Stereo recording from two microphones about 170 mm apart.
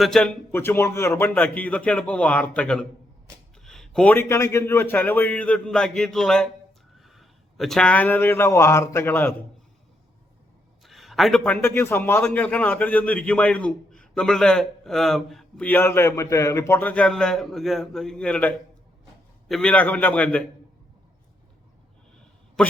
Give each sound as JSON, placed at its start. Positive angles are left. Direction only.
{"t": 0.0, "sound": "a man's voice", "side_deg": 5}
{"t": 10.8, "sound": "a man's voice", "side_deg": 0}